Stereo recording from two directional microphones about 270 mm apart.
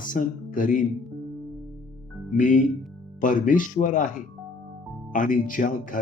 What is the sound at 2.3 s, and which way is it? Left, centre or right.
Speech, left.